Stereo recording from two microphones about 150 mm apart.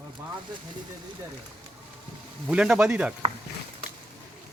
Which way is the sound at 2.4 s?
5° right (ahead or behind).